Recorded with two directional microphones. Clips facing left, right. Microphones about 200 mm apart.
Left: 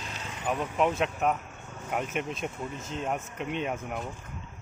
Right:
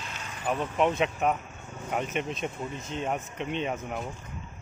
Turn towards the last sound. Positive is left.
turn(degrees=0)  # may be behind; listen again after turning